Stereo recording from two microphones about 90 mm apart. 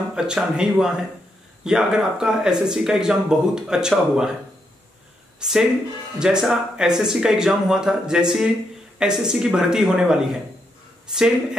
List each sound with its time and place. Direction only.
0.1 s speech: 10° right (ahead or behind)
5.4 s speech: 5° right (ahead or behind)